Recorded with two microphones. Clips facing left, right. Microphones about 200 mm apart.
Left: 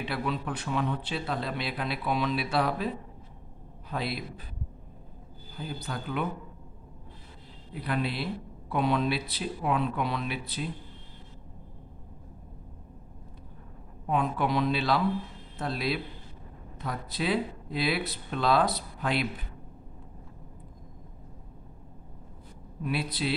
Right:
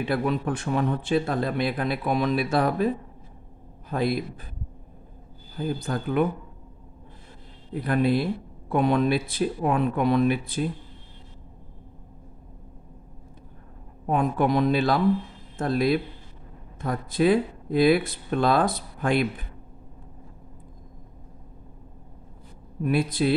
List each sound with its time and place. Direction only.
0.0 s speech: 50° right (ahead or behind)
3.9 s speech: 50° right (ahead or behind)
5.6 s speech: 50° right (ahead or behind)
7.7 s speech: 45° right (ahead or behind)
14.0 s speech: 45° right (ahead or behind)
22.8 s speech: 50° right (ahead or behind)